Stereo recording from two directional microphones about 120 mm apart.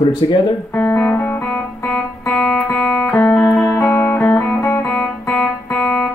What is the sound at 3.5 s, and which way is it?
Music, 20° left (ahead or behind).